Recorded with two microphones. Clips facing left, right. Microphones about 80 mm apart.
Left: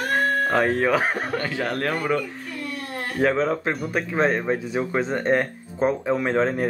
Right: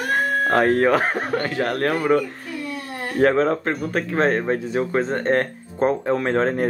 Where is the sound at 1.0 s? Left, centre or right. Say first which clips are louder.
Right 2 dB; centre.